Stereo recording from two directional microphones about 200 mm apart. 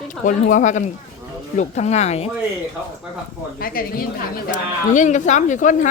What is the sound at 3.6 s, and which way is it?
A woman's voice, 45° left (ahead or behind).